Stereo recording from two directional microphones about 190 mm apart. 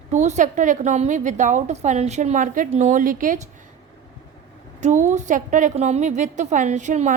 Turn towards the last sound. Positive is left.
turn(degrees=-40)  # may be behind; listen again after turning